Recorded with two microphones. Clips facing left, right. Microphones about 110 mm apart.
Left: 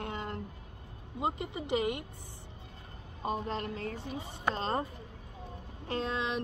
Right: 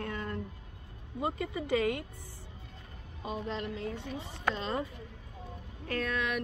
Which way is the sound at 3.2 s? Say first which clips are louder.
Left 2 dB; 45° left (ahead or behind).